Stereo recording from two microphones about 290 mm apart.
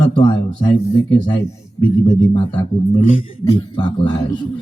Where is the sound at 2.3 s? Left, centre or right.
Centre.